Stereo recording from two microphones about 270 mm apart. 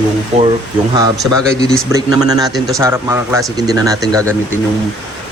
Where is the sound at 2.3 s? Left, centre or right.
Centre.